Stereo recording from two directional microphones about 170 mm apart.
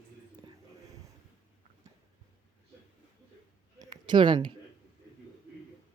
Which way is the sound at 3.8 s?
25° right (ahead or behind).